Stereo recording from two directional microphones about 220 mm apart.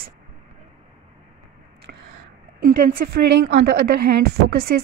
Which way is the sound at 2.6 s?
40° right (ahead or behind).